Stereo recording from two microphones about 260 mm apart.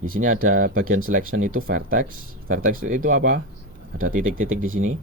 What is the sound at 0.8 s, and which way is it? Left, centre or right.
Speech, right.